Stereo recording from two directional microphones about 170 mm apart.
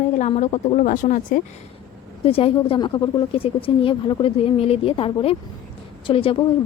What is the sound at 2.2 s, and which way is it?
Speech, 35° left (ahead or behind).